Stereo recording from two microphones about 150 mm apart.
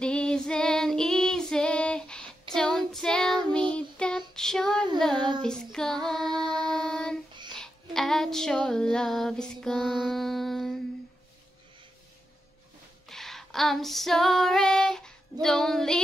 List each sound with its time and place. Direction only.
0.0 s female singing: 5° left (ahead or behind)
2.5 s child singing: 5° left (ahead or behind)
4.4 s female singing: 5° left (ahead or behind)
5.1 s child singing: 30° right (ahead or behind)
5.4 s female singing: 5° left (ahead or behind)
6.4 s a sound: 5° left (ahead or behind)
7.5 s female singing: 5° left (ahead or behind)
13.1 s female singing: centre (ahead or behind)
15.4 s child singing: 5° left (ahead or behind)